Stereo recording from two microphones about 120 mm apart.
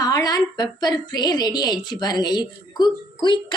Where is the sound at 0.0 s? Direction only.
35° left (ahead or behind).